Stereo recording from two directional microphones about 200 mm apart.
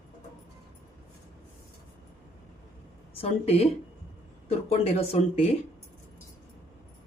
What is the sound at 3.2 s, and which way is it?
Speech, 30° left (ahead or behind).